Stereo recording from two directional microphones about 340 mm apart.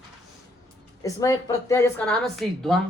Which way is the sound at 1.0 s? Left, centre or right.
Centre.